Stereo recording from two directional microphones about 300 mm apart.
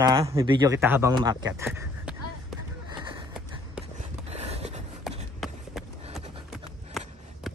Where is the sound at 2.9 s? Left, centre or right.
Centre.